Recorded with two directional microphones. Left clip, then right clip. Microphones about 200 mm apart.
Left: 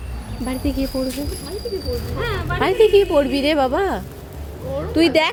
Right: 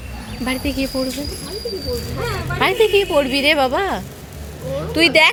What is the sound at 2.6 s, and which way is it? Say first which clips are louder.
Speech: left 1 dB; 15° left (ahead or behind).